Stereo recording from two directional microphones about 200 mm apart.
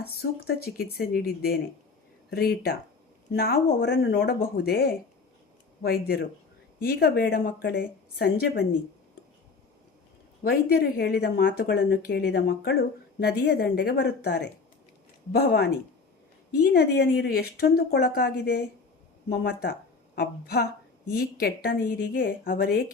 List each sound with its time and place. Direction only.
0.0 s speech: 50° left (ahead or behind)
10.4 s speech: 50° left (ahead or behind)